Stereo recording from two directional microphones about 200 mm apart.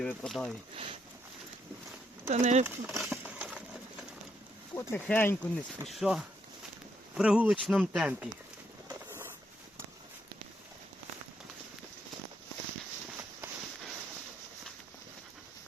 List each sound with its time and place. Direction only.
0.0 s speech: 5° left (ahead or behind)
2.3 s speech: 35° right (ahead or behind)
2.6 s a sound: 10° right (ahead or behind)
4.7 s speech: 10° left (ahead or behind)
5.9 s speech: centre (ahead or behind)
8.9 s vehicle: 10° right (ahead or behind)